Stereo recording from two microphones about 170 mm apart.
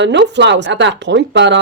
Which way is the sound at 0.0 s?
90° right.